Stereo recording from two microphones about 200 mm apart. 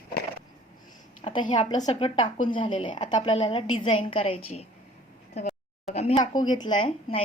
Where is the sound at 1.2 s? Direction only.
25° left (ahead or behind).